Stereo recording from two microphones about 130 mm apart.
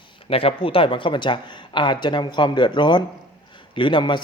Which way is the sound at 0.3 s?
45° left (ahead or behind).